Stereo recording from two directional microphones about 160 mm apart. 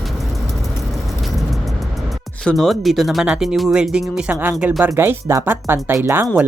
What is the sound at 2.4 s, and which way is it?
Speech, centre (ahead or behind).